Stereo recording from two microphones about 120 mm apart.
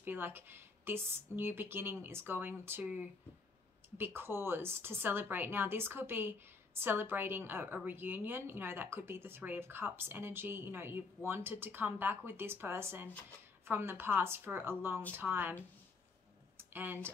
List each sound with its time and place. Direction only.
0.0 s speech: 15° right (ahead or behind)
16.5 s computer keyboard: 15° right (ahead or behind)